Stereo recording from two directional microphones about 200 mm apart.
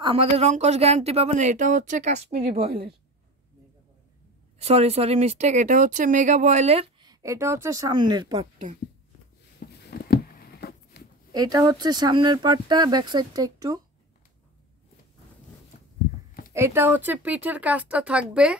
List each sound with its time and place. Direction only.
0.0 s speech: 30° right (ahead or behind)
4.6 s speech: 30° right (ahead or behind)
9.8 s a sound: 50° left (ahead or behind)
11.3 s speech: 20° right (ahead or behind)
16.5 s speech: 10° right (ahead or behind)